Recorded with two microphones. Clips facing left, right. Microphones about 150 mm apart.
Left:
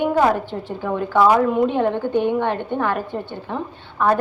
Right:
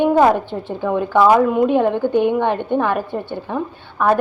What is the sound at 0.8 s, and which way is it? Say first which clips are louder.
A woman's voice: right 3 dB; 15° right (ahead or behind).